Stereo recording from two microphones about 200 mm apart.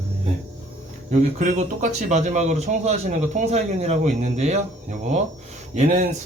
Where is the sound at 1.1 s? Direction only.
40° right (ahead or behind).